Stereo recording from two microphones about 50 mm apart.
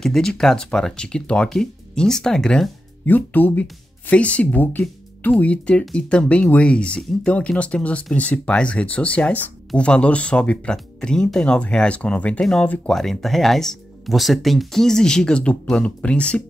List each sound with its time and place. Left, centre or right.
0.0 s speech: centre
1.5 s speech: centre
3.1 s speech: left
4.1 s speech: left
5.4 s speech: left
12.9 s speech: centre; by 16.4 s left